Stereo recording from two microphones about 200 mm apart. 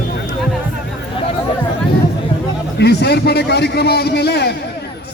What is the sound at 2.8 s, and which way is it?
A man's voice, 55° left (ahead or behind).